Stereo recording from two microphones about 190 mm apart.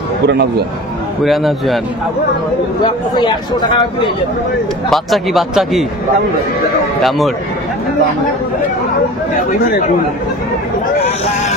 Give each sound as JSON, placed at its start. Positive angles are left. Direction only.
{"t": 0.3, "sound": "a man's voice", "side_deg": -60}
{"t": 1.2, "sound": "speech", "side_deg": 0}
{"t": 2.8, "sound": "speech", "side_deg": 25}
{"t": 4.8, "sound": "speech", "side_deg": 0}
{"t": 7.0, "sound": "speech", "side_deg": 0}
{"t": 9.5, "sound": "speech", "side_deg": 45}